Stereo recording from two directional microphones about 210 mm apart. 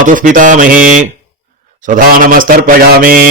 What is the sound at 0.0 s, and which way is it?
Speech, 40° right (ahead or behind).